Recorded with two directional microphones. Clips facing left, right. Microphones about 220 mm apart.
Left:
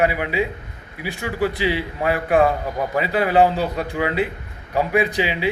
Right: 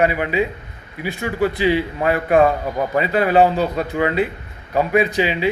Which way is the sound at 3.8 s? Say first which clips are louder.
Right 3 dB; 10° left (ahead or behind).